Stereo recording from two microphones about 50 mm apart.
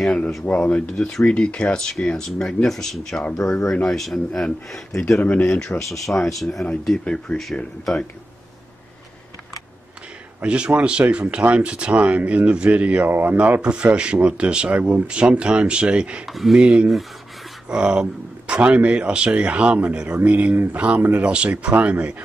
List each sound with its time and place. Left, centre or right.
0.5 s speech: left
0.9 s a man's voice: centre
5.2 s speech: left
5.9 s a man's voice: centre
10.4 s speech: right
13.6 s speech: right
16.3 s speech: centre
16.6 s speech: centre